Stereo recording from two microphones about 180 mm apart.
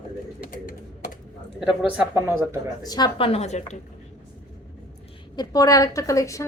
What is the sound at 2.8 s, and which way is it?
Speech, 20° left (ahead or behind).